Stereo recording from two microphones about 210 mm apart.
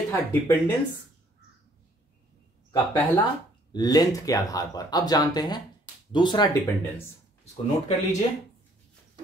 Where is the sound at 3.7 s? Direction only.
20° left (ahead or behind).